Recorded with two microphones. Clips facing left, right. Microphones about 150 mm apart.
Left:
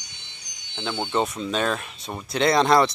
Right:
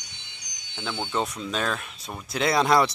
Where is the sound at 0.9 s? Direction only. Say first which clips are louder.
Left 4 dB; 20° left (ahead or behind).